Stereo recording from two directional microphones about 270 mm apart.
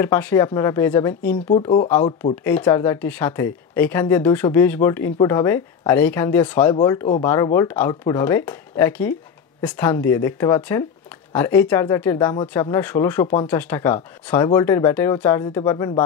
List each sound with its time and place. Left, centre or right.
0.0 s speech: centre